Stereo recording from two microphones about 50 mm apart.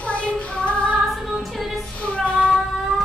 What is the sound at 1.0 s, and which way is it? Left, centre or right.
Music, centre.